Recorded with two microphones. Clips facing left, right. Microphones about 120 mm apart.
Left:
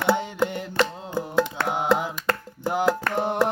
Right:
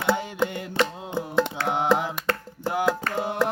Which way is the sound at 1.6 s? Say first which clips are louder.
Right 1 dB; 20° right (ahead or behind).